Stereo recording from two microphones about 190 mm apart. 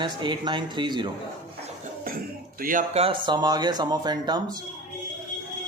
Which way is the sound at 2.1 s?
50° right (ahead or behind).